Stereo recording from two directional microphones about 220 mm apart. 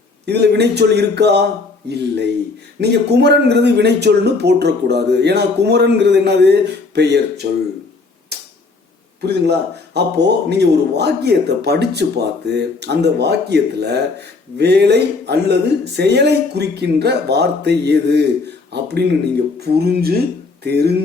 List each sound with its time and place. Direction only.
0.3 s speech: 50° right (ahead or behind)
2.8 s speech: 50° right (ahead or behind)
8.3 s tick-tock: 50° right (ahead or behind)
9.2 s speech: 50° right (ahead or behind)